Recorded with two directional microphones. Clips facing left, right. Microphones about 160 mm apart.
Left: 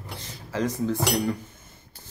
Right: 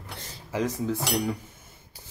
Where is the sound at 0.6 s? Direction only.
5° right (ahead or behind).